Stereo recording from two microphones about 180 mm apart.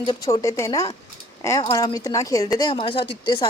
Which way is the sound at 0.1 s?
20° left (ahead or behind).